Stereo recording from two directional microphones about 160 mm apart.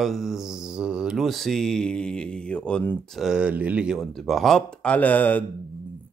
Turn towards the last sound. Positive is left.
turn(degrees=10)  # may be behind; listen again after turning